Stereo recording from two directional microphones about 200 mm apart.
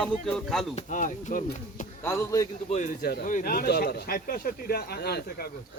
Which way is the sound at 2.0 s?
10° left (ahead or behind).